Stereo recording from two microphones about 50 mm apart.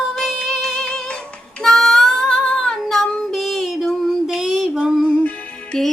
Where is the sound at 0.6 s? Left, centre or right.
Centre.